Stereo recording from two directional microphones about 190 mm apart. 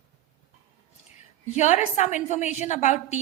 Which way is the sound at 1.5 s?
40° left (ahead or behind).